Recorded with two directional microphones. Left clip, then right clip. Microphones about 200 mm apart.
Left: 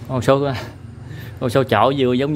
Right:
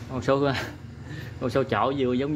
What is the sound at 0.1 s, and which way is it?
Speech, 35° left (ahead or behind).